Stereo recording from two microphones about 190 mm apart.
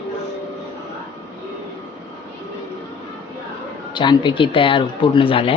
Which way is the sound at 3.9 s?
25° left (ahead or behind).